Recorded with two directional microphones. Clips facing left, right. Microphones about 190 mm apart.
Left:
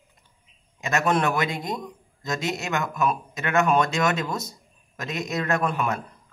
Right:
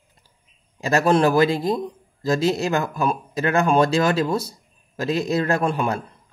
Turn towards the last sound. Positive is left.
turn(degrees=-30)  # may be behind; listen again after turning